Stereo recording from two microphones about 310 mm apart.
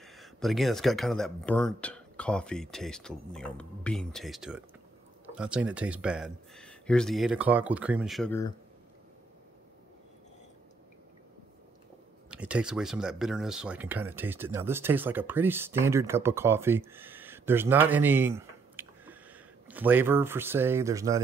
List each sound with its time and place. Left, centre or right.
0.0 s speech: centre
12.3 s speech: centre